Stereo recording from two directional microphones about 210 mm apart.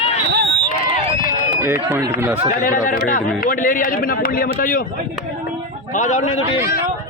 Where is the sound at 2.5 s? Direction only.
40° left (ahead or behind).